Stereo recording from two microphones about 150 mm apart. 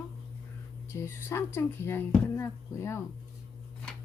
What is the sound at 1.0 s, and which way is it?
A woman's voice, 15° left (ahead or behind).